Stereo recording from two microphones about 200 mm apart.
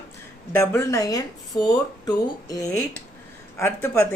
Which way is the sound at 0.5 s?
10° left (ahead or behind).